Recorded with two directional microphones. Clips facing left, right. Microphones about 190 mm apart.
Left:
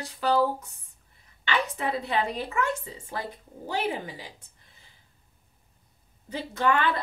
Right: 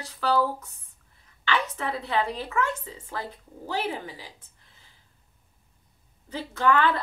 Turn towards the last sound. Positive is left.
turn(degrees=15)  # may be behind; listen again after turning